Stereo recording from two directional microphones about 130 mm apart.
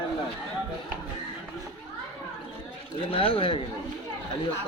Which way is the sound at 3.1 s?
45° left (ahead or behind).